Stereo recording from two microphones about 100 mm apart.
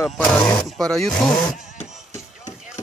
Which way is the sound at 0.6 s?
5° left (ahead or behind).